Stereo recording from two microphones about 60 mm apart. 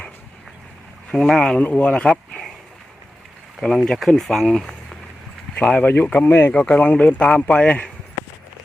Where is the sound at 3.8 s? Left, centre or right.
Centre.